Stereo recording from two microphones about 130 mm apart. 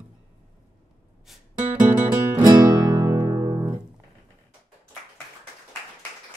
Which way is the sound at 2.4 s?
30° right (ahead or behind).